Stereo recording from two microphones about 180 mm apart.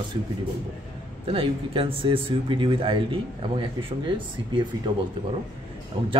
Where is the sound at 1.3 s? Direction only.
30° right (ahead or behind).